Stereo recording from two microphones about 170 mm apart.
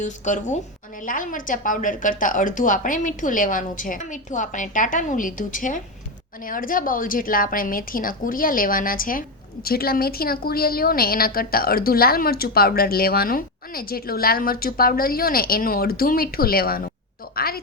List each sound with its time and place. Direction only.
0.0 s a woman's voice: 45° left (ahead or behind); by 17.6 s 60° left (ahead or behind)